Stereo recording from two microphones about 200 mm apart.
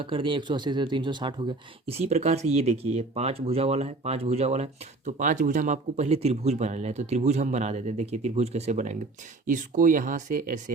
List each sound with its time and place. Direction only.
0.0 s speech: 25° right (ahead or behind)